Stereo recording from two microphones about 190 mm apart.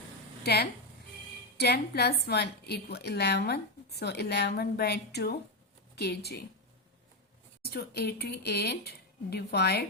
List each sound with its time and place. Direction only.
0.4 s a woman's voice: 60° left (ahead or behind)
7.6 s a woman's voice: 55° left (ahead or behind)